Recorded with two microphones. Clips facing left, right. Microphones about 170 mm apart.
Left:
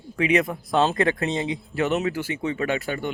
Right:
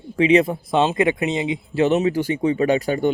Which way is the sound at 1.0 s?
20° right (ahead or behind).